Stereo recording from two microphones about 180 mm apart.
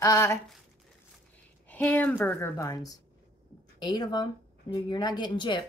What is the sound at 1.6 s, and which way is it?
A woman's voice, 10° left (ahead or behind).